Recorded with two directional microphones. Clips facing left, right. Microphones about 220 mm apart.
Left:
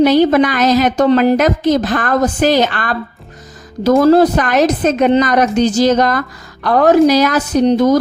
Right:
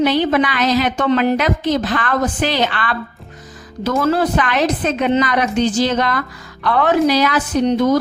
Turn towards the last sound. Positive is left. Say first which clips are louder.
# left 4 dB
turn(degrees=35)  # may be behind; listen again after turning